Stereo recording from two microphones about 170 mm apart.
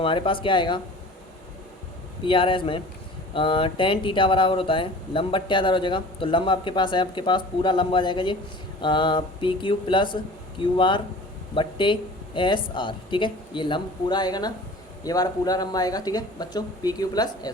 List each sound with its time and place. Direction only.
0.0 s speech: 30° left (ahead or behind)
2.2 s speech: 30° left (ahead or behind)